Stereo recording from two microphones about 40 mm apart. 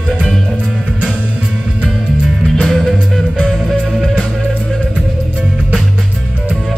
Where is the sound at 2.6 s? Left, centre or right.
Centre.